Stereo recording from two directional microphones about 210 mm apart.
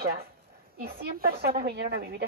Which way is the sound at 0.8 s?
45° right (ahead or behind).